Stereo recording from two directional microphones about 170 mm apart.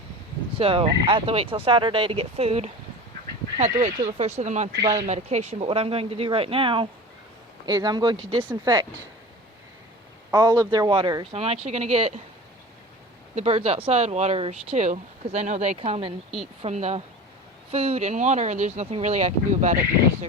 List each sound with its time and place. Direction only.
0.5 s speech: 35° right (ahead or behind)
10.3 s speech: 25° right (ahead or behind)
13.3 s speech: 35° right (ahead or behind)